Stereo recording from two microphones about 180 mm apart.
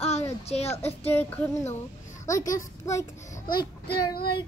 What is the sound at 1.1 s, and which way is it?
Child singing, 10° left (ahead or behind).